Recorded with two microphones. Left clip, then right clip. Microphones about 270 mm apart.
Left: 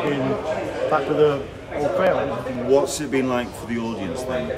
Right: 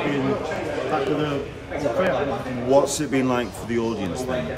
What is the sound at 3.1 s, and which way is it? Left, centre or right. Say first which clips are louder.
Speech: even; centre.